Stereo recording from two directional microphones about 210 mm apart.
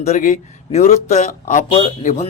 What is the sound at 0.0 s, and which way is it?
Speech, 35° left (ahead or behind).